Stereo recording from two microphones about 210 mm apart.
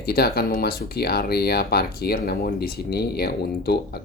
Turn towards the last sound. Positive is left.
turn(degrees=50)  # may be behind; listen again after turning